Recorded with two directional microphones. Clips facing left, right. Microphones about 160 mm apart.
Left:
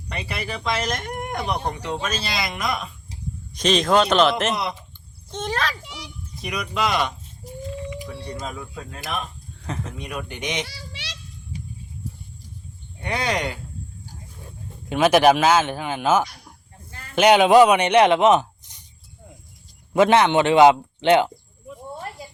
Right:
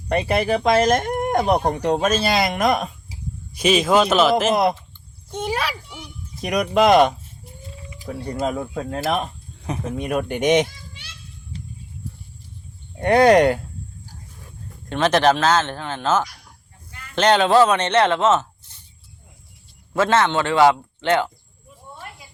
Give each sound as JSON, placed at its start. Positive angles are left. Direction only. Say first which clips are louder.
{"t": 0.1, "sound": "speech", "louder": "right 11 dB", "side_deg": -50}
{"t": 3.1, "sound": "speech", "louder": "even", "side_deg": -10}
{"t": 4.5, "sound": "speech", "louder": "right 9 dB", "side_deg": -50}
{"t": 5.3, "sound": "a child's voice", "louder": "right 2 dB", "side_deg": -10}
{"t": 5.8, "sound": "children playing", "louder": "even", "side_deg": 90}
{"t": 6.4, "sound": "speech", "louder": "right 8 dB", "side_deg": -50}
{"t": 9.6, "sound": "a child's voice", "louder": "right 4 dB", "side_deg": -15}
{"t": 10.0, "sound": "speech", "louder": "right 10 dB", "side_deg": -50}
{"t": 10.7, "sound": "children playing", "louder": "left 5 dB", "side_deg": 90}
{"t": 11.5, "sound": "a sound", "louder": "left 1 dB", "side_deg": 15}
{"t": 13.0, "sound": "speech", "louder": "right 12 dB", "side_deg": -50}
{"t": 14.8, "sound": "speech", "louder": "left 2 dB", "side_deg": 10}
{"t": 19.9, "sound": "speech", "louder": "left 2 dB", "side_deg": 15}